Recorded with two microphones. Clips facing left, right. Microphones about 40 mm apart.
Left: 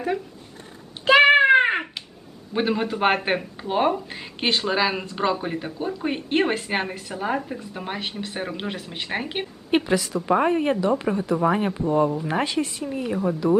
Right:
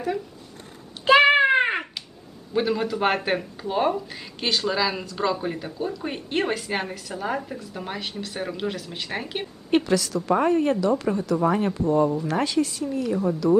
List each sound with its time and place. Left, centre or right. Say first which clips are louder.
1.3 s a sound: left 3 dB; centre
2.5 s speech: even; left
7.1 s a woman's voice: left 2 dB; centre